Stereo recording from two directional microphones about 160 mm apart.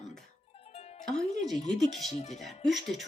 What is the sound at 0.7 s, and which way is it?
Music, 40° left (ahead or behind).